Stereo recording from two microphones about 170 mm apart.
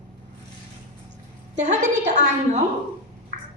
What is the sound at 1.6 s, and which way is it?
A woman's voice, 45° right (ahead or behind).